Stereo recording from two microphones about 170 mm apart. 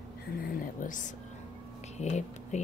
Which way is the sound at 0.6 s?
50° left (ahead or behind).